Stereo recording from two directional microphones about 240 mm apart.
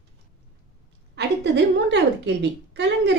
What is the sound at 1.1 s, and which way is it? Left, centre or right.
Speech, right.